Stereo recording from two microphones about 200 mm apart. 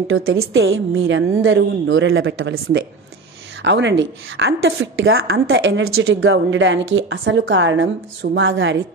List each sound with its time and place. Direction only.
0.1 s a woman's voice: 90° right; by 2.5 s 70° right (ahead or behind)
3.6 s a woman's voice: 65° right (ahead or behind)